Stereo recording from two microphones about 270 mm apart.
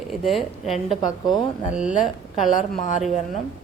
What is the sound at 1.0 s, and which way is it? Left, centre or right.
Speech, centre.